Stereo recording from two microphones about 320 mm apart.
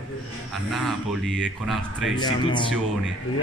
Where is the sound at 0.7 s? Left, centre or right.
Centre.